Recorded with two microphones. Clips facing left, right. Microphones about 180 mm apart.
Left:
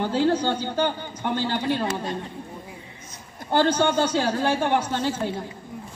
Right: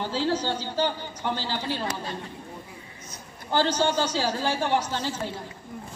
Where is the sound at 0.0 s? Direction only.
55° left (ahead or behind).